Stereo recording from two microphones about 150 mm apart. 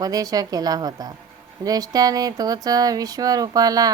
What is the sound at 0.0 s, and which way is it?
Speech, 25° right (ahead or behind).